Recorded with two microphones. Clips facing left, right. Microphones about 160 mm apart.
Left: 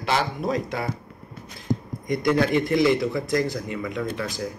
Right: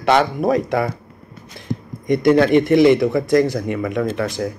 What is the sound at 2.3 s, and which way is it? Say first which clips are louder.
Speech: right 7 dB; 70° right (ahead or behind).